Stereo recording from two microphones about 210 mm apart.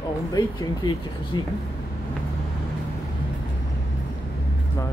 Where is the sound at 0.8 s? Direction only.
20° left (ahead or behind).